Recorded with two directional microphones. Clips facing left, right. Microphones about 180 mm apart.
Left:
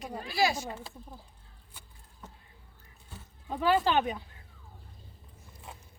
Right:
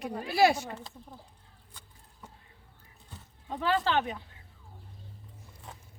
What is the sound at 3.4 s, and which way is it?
Speech, 10° left (ahead or behind).